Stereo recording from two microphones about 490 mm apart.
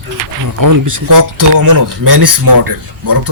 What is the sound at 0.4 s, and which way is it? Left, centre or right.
Speech, right.